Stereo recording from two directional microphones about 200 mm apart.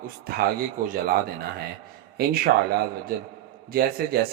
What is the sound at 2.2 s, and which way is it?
Speech, 50° right (ahead or behind).